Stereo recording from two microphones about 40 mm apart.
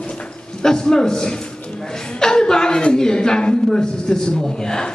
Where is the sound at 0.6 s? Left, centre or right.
Centre.